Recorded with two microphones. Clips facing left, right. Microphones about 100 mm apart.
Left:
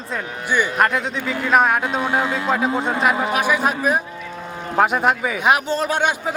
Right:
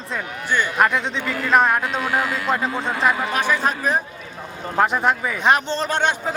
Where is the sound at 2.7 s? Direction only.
25° left (ahead or behind).